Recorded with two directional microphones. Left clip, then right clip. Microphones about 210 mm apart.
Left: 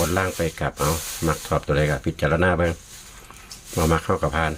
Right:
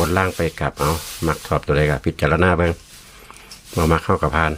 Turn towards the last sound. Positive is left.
turn(degrees=-30)  # may be behind; listen again after turning